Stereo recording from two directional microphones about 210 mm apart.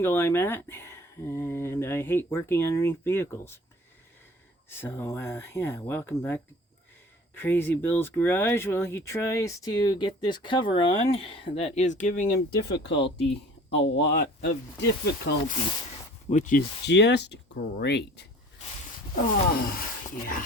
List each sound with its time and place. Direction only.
0.0 s speech: 10° left (ahead or behind)
4.7 s speech: 10° left (ahead or behind); by 15.5 s 50° left (ahead or behind)
16.3 s speech: 40° left (ahead or behind)
19.5 s speech: 45° left (ahead or behind)